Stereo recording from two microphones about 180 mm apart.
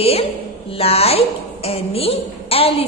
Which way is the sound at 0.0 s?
30° left (ahead or behind).